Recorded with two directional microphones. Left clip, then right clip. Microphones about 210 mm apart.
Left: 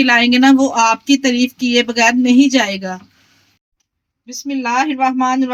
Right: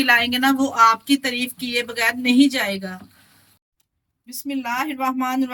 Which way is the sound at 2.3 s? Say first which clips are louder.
Left 5 dB; 35° left (ahead or behind).